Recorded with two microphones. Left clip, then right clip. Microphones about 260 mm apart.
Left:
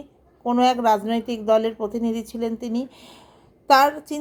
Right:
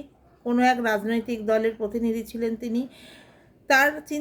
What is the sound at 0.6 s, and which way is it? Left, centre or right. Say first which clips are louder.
A woman's voice: left 4 dB; centre.